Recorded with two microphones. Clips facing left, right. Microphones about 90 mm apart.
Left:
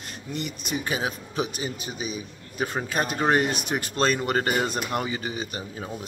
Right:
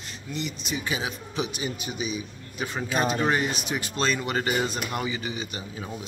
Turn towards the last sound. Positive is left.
turn(degrees=45)  # may be behind; listen again after turning